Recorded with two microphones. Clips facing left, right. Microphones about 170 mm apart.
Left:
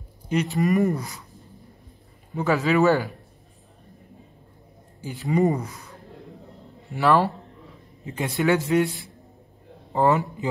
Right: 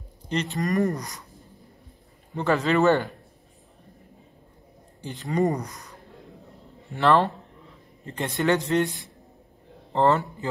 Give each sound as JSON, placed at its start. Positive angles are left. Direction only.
{"t": 0.3, "sound": "a man's voice", "side_deg": 5}
{"t": 2.3, "sound": "a man's voice", "side_deg": 5}
{"t": 5.0, "sound": "a man's voice", "side_deg": 0}
{"t": 10.1, "sound": "speech", "side_deg": 15}